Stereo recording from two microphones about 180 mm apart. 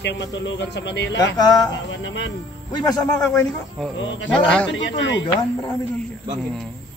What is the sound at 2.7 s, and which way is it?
Speech, 20° left (ahead or behind).